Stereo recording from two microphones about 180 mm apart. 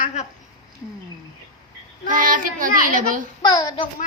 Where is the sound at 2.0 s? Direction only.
50° right (ahead or behind).